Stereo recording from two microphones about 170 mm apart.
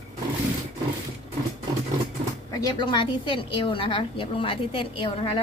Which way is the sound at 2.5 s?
25° left (ahead or behind).